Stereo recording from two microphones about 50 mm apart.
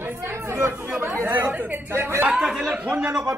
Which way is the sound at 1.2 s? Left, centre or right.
Right.